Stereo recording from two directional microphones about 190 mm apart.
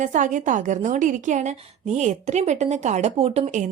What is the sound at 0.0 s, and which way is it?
Speech, 40° right (ahead or behind).